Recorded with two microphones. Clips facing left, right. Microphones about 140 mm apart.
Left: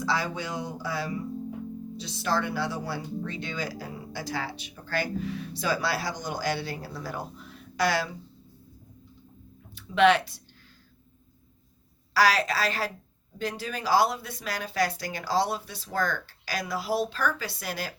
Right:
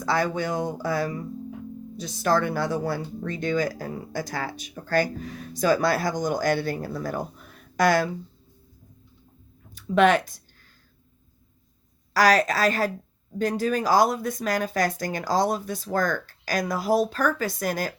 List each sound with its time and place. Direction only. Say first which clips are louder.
0.0 s speech: right 5 dB; 50° right (ahead or behind)
9.7 s speech: right 2 dB; 45° right (ahead or behind)
12.1 s speech: right 4 dB; 45° right (ahead or behind)